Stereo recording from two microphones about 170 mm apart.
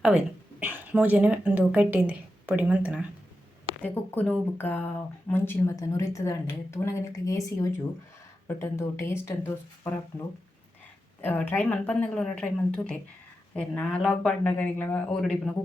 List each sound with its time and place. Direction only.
0.6 s a woman's voice: 10° right (ahead or behind)
3.7 s a woman's voice: 10° left (ahead or behind)
11.2 s a woman's voice: 10° left (ahead or behind)